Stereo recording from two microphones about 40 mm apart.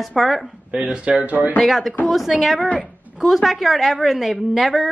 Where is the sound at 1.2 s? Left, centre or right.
Right.